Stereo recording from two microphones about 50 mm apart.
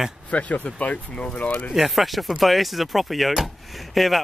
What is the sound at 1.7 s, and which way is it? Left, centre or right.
Speech, centre.